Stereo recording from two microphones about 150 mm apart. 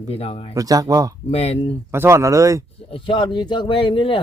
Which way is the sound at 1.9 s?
15° right (ahead or behind).